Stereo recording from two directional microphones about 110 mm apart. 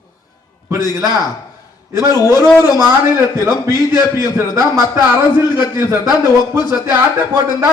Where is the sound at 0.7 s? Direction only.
35° left (ahead or behind).